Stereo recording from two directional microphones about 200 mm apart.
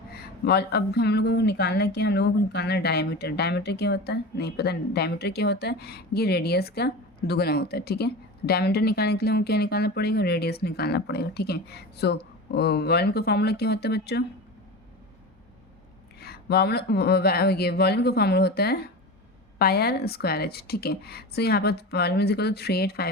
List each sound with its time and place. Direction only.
0.2 s speech: 55° left (ahead or behind)
16.2 s speech: 50° left (ahead or behind)